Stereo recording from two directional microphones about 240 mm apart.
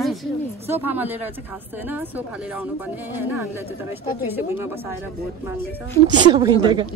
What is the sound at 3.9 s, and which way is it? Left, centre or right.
Speech, centre.